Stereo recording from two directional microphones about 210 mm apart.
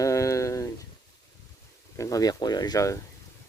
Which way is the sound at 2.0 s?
15° left (ahead or behind).